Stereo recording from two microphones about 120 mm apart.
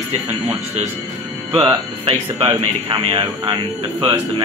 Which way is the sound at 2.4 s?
35° right (ahead or behind).